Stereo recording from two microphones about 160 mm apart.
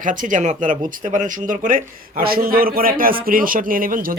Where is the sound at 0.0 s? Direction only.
55° right (ahead or behind).